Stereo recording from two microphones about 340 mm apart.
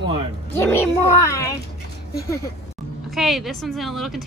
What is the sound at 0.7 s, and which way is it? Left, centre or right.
Speech, centre.